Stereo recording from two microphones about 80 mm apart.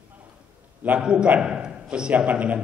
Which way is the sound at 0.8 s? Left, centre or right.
Centre.